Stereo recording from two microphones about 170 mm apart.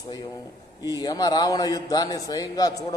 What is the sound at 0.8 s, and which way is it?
A man's voice, 25° left (ahead or behind).